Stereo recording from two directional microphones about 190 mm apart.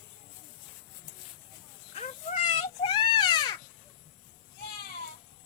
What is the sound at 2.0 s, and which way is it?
Cat, 40° left (ahead or behind).